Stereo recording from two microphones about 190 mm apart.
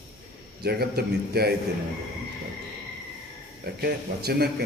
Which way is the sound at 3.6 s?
55° right (ahead or behind).